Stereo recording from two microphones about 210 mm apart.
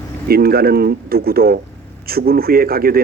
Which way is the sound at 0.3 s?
45° right (ahead or behind).